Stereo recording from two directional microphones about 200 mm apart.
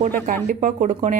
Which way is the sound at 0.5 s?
30° right (ahead or behind).